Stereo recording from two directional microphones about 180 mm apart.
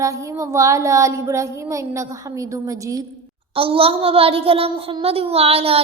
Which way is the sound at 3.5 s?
30° right (ahead or behind).